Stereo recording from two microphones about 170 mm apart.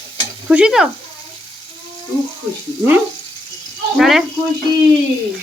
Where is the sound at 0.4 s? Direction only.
5° right (ahead or behind).